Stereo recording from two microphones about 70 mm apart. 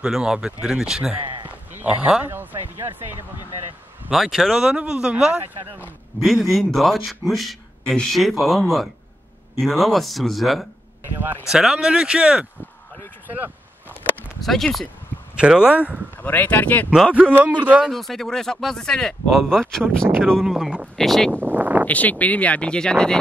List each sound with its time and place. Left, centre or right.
0.0 s speech: centre
1.8 s speech: centre
2.2 s a sound: right
4.1 s speech: centre
6.2 s speech: centre
14.4 s speech: centre
15.3 s speech: centre
16.2 s speech: left
17.1 s a man's voice: right
17.8 s speech: centre
21.3 s a sound: right
21.8 s speech: left